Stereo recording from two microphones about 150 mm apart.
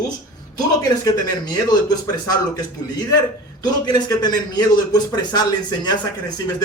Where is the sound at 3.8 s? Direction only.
25° left (ahead or behind).